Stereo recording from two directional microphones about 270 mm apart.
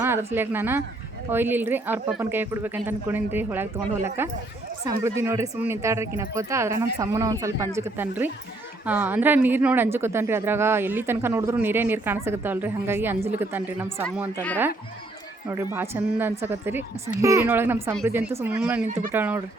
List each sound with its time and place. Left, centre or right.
0.0 s a woman's voice: centre
15.7 s a woman's voice: centre
18.9 s speech: right
19.1 s a woman's voice: centre